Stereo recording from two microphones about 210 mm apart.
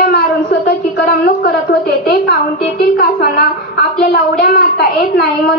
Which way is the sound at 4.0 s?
50° left (ahead or behind).